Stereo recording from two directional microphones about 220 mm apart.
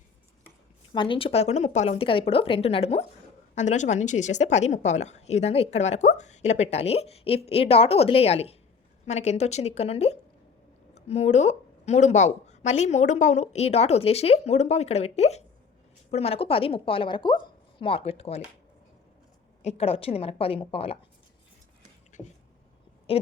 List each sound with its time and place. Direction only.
0.9 s a woman's voice: 20° left (ahead or behind)
19.6 s speech: 25° left (ahead or behind)
23.1 s speech: 25° left (ahead or behind)